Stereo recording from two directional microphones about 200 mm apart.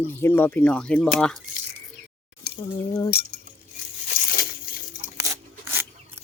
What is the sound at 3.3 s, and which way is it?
Chink, 55° left (ahead or behind).